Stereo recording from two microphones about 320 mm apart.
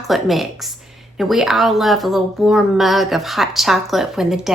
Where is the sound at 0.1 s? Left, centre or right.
Centre.